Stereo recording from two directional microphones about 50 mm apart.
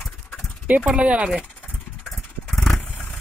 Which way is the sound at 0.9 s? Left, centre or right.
Right.